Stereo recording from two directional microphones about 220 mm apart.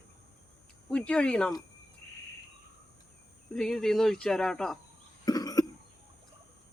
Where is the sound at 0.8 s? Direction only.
5° left (ahead or behind).